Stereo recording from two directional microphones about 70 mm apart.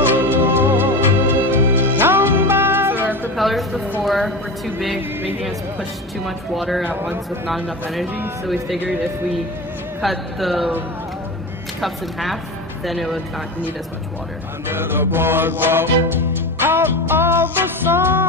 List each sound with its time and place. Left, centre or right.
0.1 s music: right
3.3 s a sound: centre
4.0 s speech: centre
6.9 s speech: right
7.4 s speech: centre
8.7 s speech: right
10.0 s speech: centre
11.8 s speech: centre
14.7 s music: right